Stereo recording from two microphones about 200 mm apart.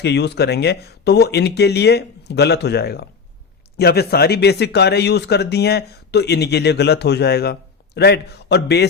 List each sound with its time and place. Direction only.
0.0 s speech: 55° left (ahead or behind)